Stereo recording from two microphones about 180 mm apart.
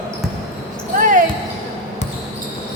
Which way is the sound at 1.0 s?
45° right (ahead or behind).